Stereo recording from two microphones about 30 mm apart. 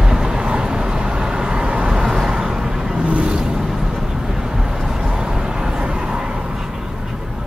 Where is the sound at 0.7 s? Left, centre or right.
Right.